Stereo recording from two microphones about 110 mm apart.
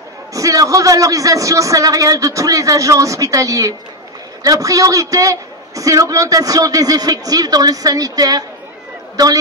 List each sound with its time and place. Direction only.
0.3 s a man's voice: 30° right (ahead or behind)